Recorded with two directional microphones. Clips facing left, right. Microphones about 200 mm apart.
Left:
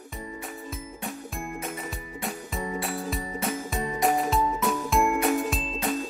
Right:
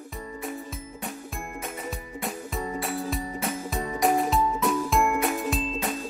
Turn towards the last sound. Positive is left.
turn(degrees=0)  # may be behind; listen again after turning